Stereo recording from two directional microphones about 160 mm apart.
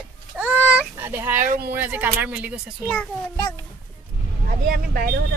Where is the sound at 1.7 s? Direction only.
10° right (ahead or behind).